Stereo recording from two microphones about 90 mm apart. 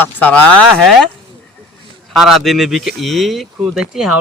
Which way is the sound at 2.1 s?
Centre (ahead or behind).